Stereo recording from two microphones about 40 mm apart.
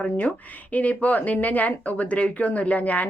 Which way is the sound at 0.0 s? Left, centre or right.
Left.